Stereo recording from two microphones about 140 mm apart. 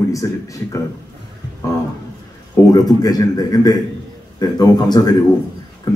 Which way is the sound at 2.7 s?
25° left (ahead or behind).